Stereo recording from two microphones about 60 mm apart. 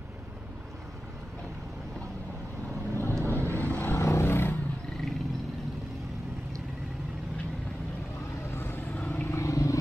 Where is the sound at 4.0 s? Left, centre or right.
Left.